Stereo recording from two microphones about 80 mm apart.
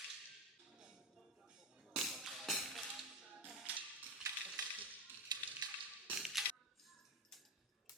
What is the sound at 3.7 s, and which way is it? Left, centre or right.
Music, centre.